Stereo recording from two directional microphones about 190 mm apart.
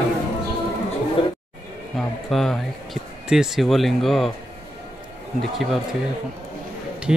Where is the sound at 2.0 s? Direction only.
Centre (ahead or behind).